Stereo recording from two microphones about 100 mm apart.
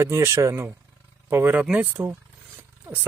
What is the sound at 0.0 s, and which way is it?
Speech, 25° right (ahead or behind).